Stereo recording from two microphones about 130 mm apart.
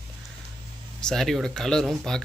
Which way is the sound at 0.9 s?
5° left (ahead or behind).